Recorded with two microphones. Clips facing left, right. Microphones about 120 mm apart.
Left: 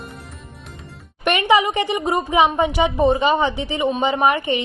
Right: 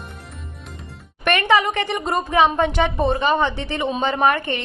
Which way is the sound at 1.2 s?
15° left (ahead or behind).